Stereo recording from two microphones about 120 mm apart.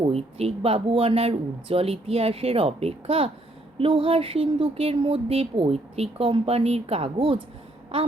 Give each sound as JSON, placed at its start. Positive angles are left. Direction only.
{"t": 0.0, "sound": "speech", "side_deg": -55}